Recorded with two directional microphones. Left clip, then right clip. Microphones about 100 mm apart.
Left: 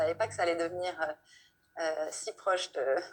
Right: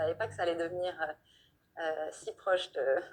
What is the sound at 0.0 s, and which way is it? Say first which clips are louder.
A woman's voice: left 3 dB; 35° left (ahead or behind).